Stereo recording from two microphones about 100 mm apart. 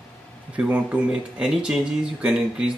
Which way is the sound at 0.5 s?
15° right (ahead or behind).